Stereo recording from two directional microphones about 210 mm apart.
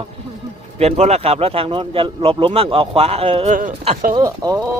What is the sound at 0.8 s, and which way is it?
Speech, 30° right (ahead or behind).